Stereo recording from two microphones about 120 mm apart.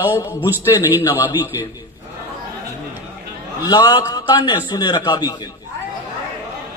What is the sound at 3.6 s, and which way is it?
A man's voice, 35° left (ahead or behind).